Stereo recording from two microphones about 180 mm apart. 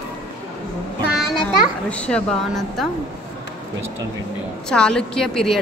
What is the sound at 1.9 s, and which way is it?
Speech, 5° left (ahead or behind).